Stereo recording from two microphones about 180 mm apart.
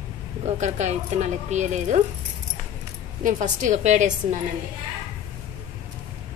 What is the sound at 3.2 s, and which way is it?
Speech, 45° right (ahead or behind).